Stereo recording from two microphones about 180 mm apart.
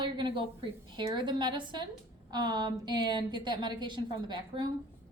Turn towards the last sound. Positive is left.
turn(degrees=-25)  # may be behind; listen again after turning